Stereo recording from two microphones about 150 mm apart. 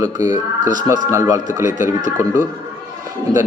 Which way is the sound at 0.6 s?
60° right (ahead or behind).